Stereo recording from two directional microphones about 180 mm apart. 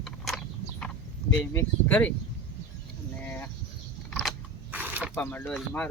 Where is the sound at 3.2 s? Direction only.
10° left (ahead or behind).